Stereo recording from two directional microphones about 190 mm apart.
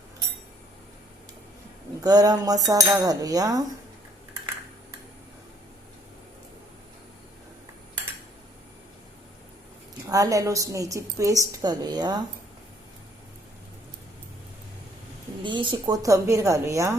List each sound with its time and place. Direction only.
2.0 s cutlery: 20° right (ahead or behind)
10.1 s a woman's voice: 15° right (ahead or behind)
11.6 s cutlery: 20° right (ahead or behind)
15.4 s a woman's voice: 25° right (ahead or behind)